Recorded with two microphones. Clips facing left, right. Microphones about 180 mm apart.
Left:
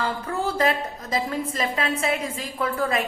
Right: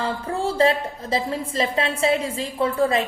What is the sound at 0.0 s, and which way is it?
A woman's voice, 30° right (ahead or behind).